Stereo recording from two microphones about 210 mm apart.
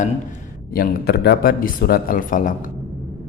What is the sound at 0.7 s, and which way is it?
A man's voice, 45° left (ahead or behind).